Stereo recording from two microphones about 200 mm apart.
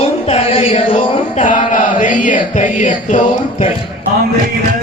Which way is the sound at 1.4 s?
40° left (ahead or behind).